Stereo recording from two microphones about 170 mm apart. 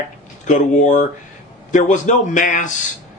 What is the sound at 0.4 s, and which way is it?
Speech, 45° left (ahead or behind).